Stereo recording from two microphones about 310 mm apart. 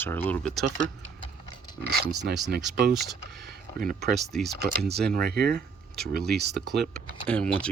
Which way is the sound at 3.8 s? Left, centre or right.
Right.